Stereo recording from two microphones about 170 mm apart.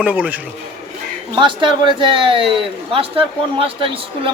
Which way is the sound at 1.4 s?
30° right (ahead or behind).